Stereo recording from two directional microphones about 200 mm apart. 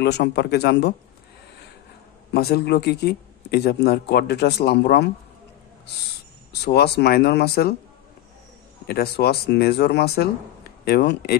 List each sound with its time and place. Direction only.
0.0 s speech: 55° left (ahead or behind)
2.3 s speech: 50° left (ahead or behind)
6.5 s speech: 55° left (ahead or behind)
8.8 s speech: 50° left (ahead or behind)